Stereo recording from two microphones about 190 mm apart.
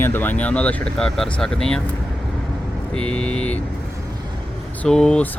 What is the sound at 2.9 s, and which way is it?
Speech, 5° left (ahead or behind).